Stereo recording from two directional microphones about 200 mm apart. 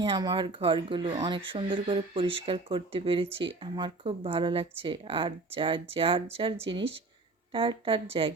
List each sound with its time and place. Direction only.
0.0 s speech: 20° right (ahead or behind)